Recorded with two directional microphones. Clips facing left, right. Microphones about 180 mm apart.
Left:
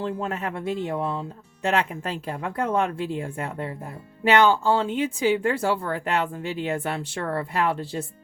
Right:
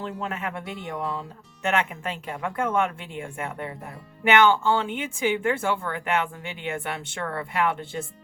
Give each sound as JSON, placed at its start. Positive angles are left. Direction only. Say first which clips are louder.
{"t": 0.3, "sound": "speech", "louder": "left 4 dB", "side_deg": 35}